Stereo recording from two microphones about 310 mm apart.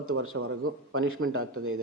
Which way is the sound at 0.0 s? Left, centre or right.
Right.